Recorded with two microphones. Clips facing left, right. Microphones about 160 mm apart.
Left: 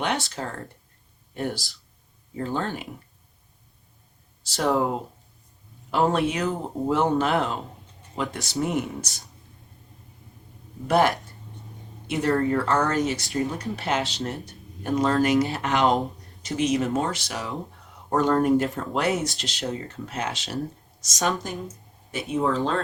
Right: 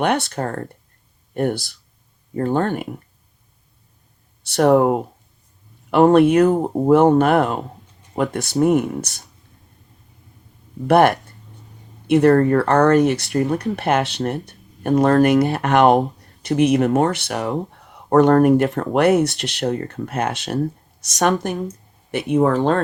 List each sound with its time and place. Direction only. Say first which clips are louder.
0.0 s speech: right 8 dB; 60° right (ahead or behind)
4.4 s speech: right 9 dB; 60° right (ahead or behind)
10.8 s speech: right 7 dB; 60° right (ahead or behind)